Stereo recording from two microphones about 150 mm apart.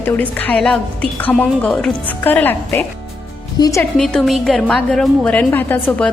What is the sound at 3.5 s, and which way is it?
Speech, 25° left (ahead or behind).